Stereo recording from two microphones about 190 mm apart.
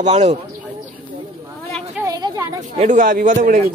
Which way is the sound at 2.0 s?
20° right (ahead or behind).